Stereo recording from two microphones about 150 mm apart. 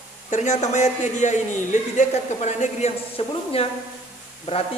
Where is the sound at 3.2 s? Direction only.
35° left (ahead or behind).